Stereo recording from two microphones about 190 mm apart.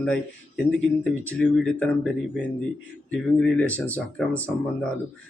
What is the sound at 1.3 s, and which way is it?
Speech, 5° left (ahead or behind).